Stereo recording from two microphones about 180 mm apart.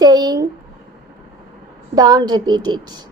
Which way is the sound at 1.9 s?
20° right (ahead or behind).